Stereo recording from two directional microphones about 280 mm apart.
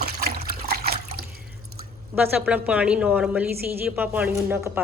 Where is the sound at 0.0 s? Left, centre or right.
Right.